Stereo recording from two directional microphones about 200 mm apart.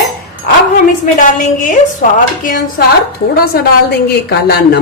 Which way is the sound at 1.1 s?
45° left (ahead or behind).